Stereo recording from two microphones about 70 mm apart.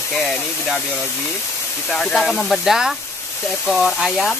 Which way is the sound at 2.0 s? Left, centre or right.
Centre.